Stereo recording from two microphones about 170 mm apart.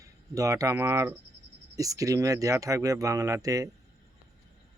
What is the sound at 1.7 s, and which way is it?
Speech, 20° right (ahead or behind).